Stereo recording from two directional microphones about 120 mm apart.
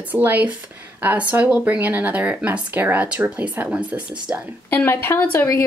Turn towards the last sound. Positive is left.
turn(degrees=15)  # may be behind; listen again after turning